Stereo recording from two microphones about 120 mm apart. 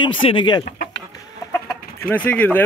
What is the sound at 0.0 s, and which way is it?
Speech, 45° left (ahead or behind).